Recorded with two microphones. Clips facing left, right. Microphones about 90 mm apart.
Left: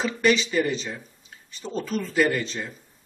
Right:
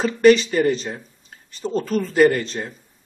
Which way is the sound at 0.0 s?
45° right (ahead or behind).